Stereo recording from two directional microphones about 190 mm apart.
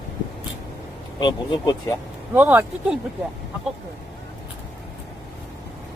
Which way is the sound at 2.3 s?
10° right (ahead or behind).